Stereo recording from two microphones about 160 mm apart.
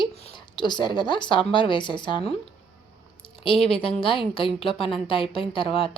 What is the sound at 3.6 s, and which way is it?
A woman's voice, 35° left (ahead or behind).